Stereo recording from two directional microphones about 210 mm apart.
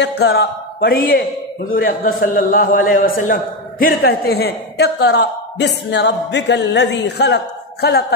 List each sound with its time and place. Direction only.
0.2 s a man's voice: 50° left (ahead or behind)